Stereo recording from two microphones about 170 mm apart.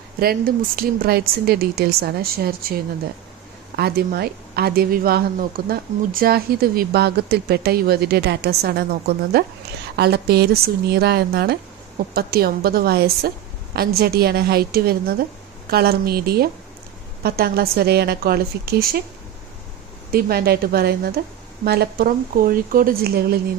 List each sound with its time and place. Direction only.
0.2 s speech: 60° right (ahead or behind)
20.1 s speech: 65° right (ahead or behind)